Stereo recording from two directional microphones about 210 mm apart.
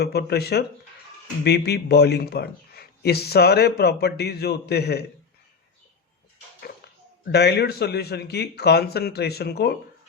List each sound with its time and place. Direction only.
0.0 s a man's voice: 50° left (ahead or behind)
7.3 s a man's voice: 50° left (ahead or behind)